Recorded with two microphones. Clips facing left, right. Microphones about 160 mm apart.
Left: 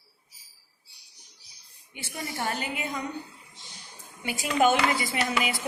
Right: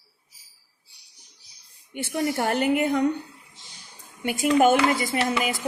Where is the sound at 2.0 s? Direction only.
60° right (ahead or behind).